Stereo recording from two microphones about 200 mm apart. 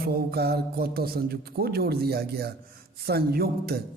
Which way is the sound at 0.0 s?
50° right (ahead or behind).